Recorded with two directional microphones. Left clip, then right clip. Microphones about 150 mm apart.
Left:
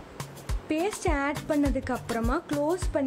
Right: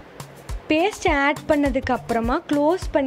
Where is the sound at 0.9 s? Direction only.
15° right (ahead or behind).